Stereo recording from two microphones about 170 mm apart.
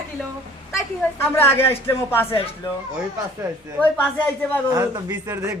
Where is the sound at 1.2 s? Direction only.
15° left (ahead or behind).